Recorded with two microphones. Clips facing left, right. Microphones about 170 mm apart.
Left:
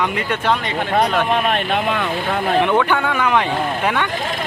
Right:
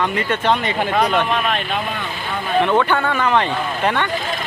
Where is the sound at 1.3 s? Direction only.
60° left (ahead or behind); by 2.5 s 75° left (ahead or behind).